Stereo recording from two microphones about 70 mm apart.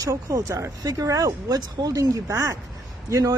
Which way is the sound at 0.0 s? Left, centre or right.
Right.